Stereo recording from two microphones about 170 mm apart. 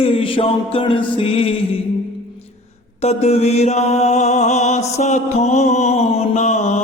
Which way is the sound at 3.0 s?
40° left (ahead or behind).